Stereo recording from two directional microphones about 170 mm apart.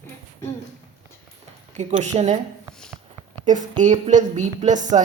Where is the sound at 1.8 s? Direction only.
40° right (ahead or behind).